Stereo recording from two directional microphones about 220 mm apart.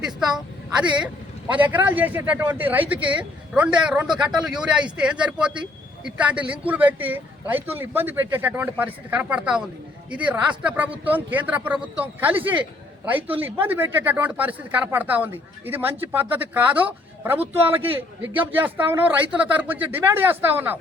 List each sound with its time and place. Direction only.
0.9 s speech: 5° right (ahead or behind)